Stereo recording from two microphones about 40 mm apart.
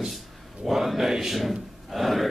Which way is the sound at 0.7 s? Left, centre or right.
Centre.